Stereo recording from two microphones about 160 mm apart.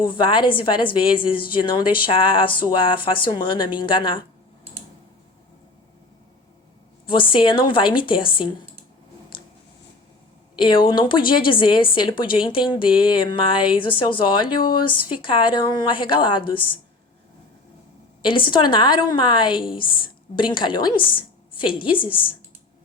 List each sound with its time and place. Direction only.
0.0 s a woman's voice: 30° left (ahead or behind)
7.1 s a woman's voice: 30° left (ahead or behind)
10.6 s a woman's voice: 30° left (ahead or behind)
18.2 s a woman's voice: 30° left (ahead or behind)